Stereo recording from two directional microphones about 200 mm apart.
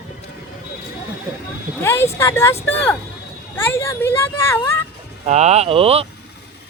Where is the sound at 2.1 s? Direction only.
10° left (ahead or behind).